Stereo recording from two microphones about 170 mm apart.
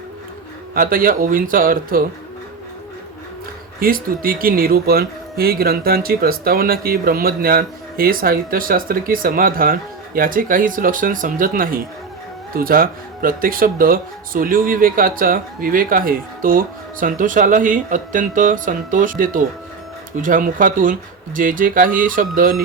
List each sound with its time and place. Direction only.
0.7 s speech: 55° right (ahead or behind)
3.8 s speech: 60° right (ahead or behind)